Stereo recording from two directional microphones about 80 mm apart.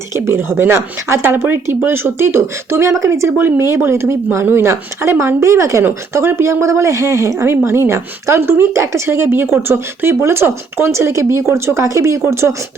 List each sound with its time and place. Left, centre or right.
0.1 s a woman's voice: right